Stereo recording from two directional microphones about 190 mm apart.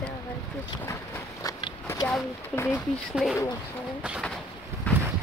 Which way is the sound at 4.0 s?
Centre (ahead or behind).